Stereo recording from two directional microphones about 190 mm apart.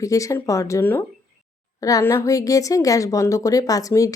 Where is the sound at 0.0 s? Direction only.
15° left (ahead or behind).